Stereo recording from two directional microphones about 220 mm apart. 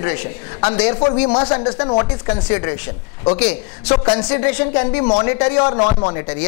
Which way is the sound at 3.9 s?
20° left (ahead or behind).